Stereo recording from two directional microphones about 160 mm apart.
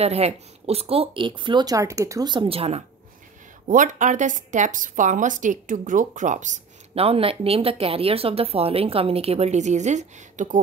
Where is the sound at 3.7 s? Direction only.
55° right (ahead or behind).